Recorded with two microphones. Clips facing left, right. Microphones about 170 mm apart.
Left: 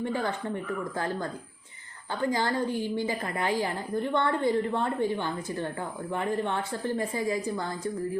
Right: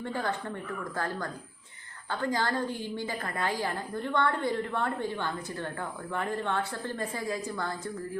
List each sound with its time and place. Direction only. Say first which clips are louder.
0.0 s a woman's voice: left 3 dB; 15° left (ahead or behind)